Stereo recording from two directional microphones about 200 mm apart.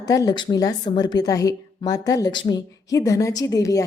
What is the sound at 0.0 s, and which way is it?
A woman's voice, 20° left (ahead or behind).